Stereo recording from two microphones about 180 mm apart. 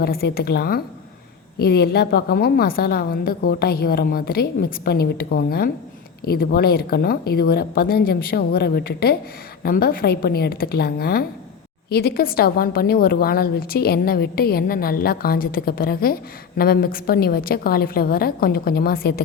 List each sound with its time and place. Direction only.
0.0 s a woman's voice: 60° left (ahead or behind)